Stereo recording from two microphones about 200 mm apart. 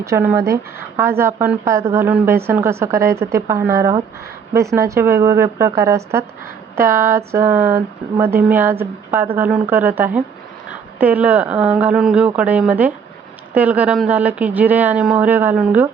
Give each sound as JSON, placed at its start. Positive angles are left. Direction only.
{"t": 0.0, "sound": "speech", "side_deg": -15}